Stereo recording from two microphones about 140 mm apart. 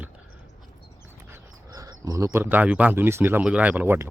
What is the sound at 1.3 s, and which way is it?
Speech, 25° right (ahead or behind).